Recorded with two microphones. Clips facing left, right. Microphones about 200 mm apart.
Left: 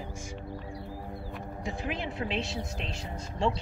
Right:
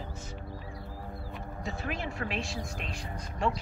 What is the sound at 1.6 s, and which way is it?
Speech, 15° left (ahead or behind).